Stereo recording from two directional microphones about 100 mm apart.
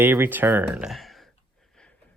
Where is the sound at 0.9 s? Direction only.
Centre (ahead or behind).